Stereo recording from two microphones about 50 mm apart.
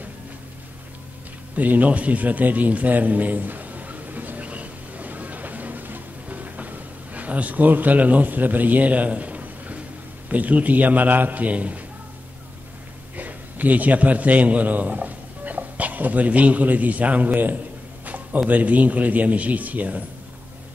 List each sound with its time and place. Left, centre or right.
1.5 s a sound: right
10.3 s a man's voice: right
13.1 s a man's voice: right